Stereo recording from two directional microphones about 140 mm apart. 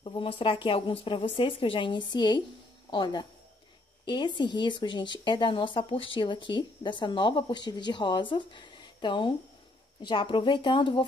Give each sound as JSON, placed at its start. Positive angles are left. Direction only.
{"t": 0.0, "sound": "speech", "side_deg": 40}